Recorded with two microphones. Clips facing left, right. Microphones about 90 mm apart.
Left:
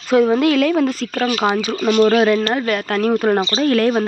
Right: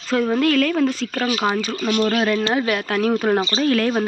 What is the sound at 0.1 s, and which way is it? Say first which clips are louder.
Speech: left 4 dB; 15° left (ahead or behind).